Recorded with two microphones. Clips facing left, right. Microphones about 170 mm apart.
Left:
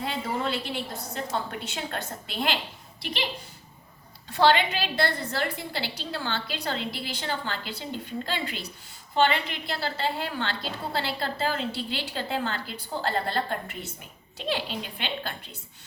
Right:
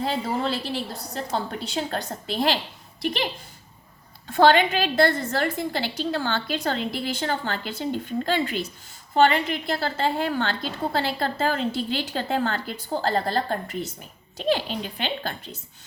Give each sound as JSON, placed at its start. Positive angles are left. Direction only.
{"t": 0.0, "sound": "a woman's voice", "side_deg": -35}
{"t": 4.3, "sound": "a woman's voice", "side_deg": -50}